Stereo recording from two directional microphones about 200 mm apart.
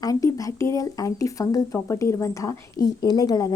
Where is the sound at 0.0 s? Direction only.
15° left (ahead or behind).